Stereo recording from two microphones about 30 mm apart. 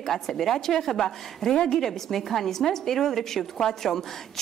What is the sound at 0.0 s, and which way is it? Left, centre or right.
A woman's voice, centre.